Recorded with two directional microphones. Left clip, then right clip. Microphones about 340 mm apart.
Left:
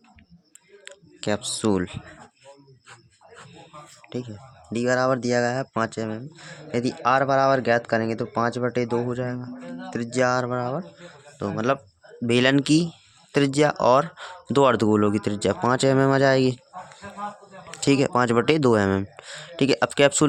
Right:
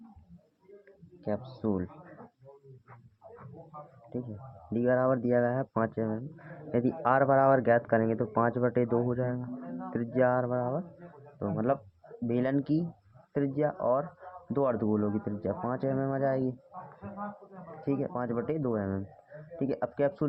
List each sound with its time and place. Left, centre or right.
0.9 s speech: left
4.7 s speech: left
17.7 s speech: left